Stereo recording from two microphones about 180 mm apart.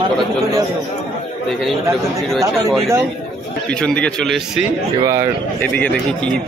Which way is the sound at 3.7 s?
5° left (ahead or behind).